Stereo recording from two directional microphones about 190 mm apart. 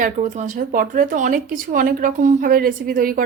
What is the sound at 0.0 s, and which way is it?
Speech, 40° right (ahead or behind).